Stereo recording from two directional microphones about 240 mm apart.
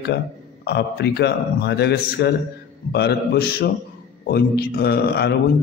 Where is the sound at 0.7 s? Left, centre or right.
Left.